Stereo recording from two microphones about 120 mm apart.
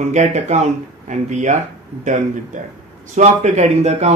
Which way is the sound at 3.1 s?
70° right (ahead or behind).